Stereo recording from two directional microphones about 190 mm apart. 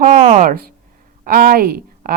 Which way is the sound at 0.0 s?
40° right (ahead or behind).